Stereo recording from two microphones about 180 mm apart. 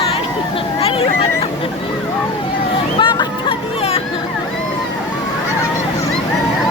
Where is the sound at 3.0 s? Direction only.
25° left (ahead or behind).